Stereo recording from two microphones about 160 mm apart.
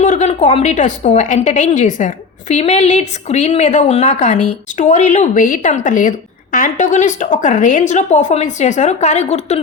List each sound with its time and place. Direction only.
0.0 s a sound: 45° left (ahead or behind)
0.3 s a woman's voice: 35° left (ahead or behind)
0.6 s a woman's voice: 50° left (ahead or behind)